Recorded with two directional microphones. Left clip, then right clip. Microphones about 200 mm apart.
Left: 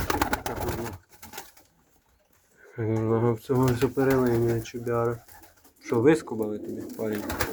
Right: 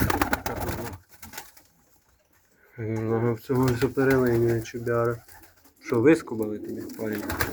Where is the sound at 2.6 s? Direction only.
25° left (ahead or behind).